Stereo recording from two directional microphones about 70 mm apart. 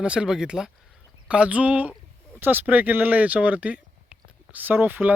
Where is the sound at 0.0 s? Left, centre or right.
Centre.